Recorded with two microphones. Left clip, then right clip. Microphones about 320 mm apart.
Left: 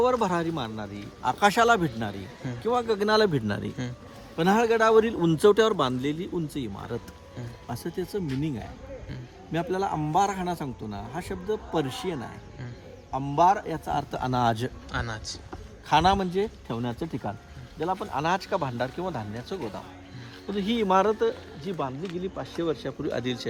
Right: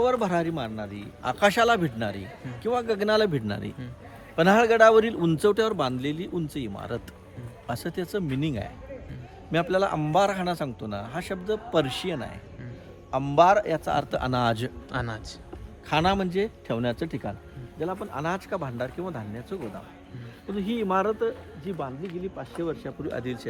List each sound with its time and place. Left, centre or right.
0.0 s a man's voice: centre
4.4 s a man's voice: centre; by 19.5 s left
20.6 s speech: left